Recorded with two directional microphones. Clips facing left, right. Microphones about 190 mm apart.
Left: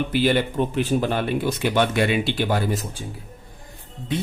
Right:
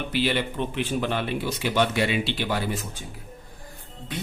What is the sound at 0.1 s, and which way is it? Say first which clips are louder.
Speech: left 2 dB; 45° left (ahead or behind).